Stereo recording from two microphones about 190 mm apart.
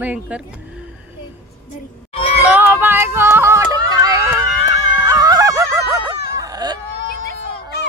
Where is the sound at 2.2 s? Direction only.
30° left (ahead or behind).